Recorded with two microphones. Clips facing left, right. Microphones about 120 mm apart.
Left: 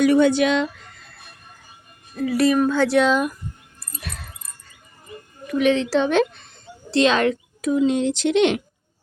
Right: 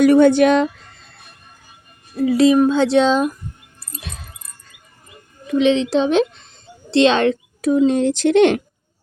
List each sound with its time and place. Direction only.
0.0 s speech: 50° right (ahead or behind)
2.2 s speech: 20° right (ahead or behind)
5.5 s a woman's voice: 20° right (ahead or behind); by 8.6 s 50° right (ahead or behind)